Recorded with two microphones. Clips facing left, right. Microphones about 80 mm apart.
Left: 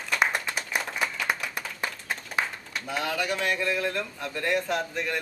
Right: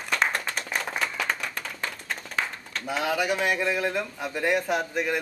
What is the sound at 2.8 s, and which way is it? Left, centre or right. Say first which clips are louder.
Speech: right 3 dB; centre.